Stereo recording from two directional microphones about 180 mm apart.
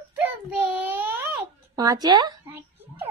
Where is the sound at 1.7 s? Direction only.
20° right (ahead or behind).